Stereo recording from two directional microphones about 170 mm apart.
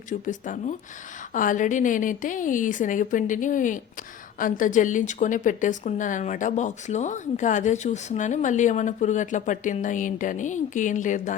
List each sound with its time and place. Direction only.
0.1 s speech: 50° left (ahead or behind)